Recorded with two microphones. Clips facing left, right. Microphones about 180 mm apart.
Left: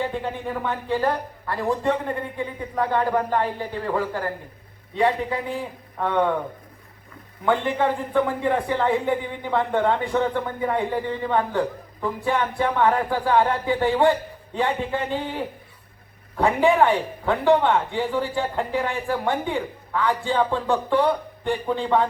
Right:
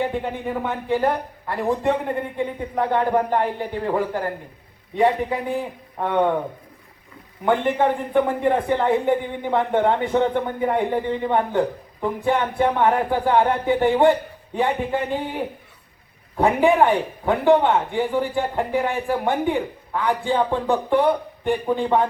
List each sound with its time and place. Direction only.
0.0 s speech: 15° right (ahead or behind)
7.4 s a man's voice: 20° right (ahead or behind)